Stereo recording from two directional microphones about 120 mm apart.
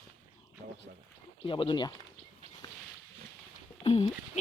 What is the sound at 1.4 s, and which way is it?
Speech, 45° left (ahead or behind).